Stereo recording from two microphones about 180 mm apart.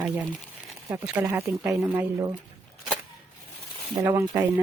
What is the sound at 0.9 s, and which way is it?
Speech, 15° right (ahead or behind).